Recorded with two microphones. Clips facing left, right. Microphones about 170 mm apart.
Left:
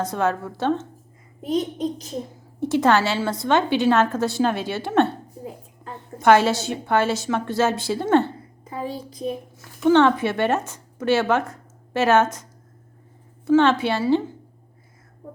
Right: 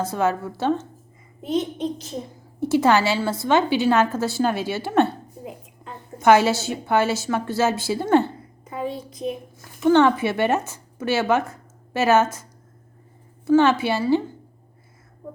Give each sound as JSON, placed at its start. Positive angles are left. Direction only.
{"t": 0.0, "sound": "a woman's voice", "side_deg": -5}
{"t": 1.5, "sound": "a child's voice", "side_deg": 40}
{"t": 2.6, "sound": "a woman's voice", "side_deg": -10}
{"t": 6.1, "sound": "a woman's voice", "side_deg": -10}
{"t": 8.6, "sound": "a child's voice", "side_deg": 30}
{"t": 9.8, "sound": "a woman's voice", "side_deg": -5}